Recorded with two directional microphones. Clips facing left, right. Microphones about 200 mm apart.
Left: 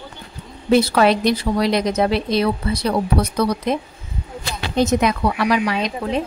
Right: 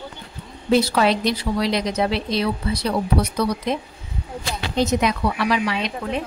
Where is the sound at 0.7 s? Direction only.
55° left (ahead or behind).